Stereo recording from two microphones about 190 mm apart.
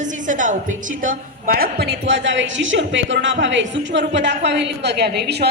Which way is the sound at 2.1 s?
70° right (ahead or behind).